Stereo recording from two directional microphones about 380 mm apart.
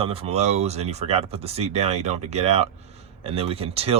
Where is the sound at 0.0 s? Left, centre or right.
Centre.